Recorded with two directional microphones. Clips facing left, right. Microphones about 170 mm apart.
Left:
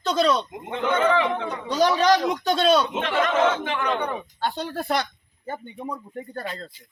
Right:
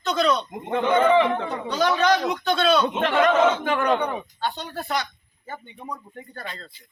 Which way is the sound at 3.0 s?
45° right (ahead or behind).